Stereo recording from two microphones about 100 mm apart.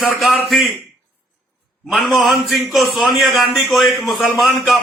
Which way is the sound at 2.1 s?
Centre (ahead or behind).